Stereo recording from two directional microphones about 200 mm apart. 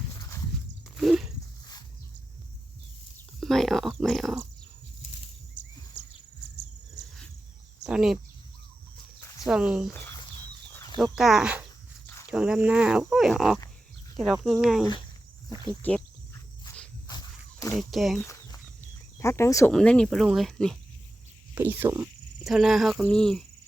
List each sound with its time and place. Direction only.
0.2 s walk: 15° left (ahead or behind)
0.9 s a sound: centre (ahead or behind)
3.4 s speech: centre (ahead or behind)
5.6 s a sound: 65° right (ahead or behind)
7.9 s speech: 5° right (ahead or behind)
9.4 s speech: 5° right (ahead or behind)
11.0 s speech: centre (ahead or behind)
15.8 s cricket: 10° left (ahead or behind)
17.1 s walk: 20° left (ahead or behind)
17.7 s speech: centre (ahead or behind)
18.3 s a sound: 15° left (ahead or behind)
19.7 s speech: 5° left (ahead or behind)
21.5 s speech: 10° right (ahead or behind)
22.4 s speech: centre (ahead or behind)